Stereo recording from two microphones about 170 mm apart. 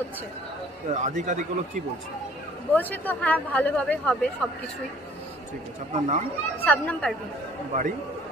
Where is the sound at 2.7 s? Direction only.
10° left (ahead or behind).